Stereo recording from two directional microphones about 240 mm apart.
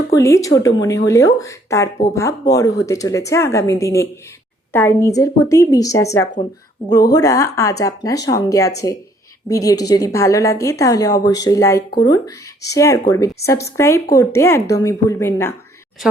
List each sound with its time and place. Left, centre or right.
0.1 s speech: centre